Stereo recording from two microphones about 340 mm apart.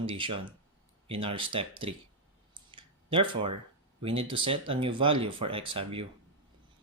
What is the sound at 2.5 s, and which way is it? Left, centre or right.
Clicking, centre.